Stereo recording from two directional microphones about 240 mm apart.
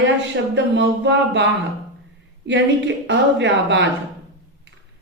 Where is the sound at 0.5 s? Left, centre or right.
Right.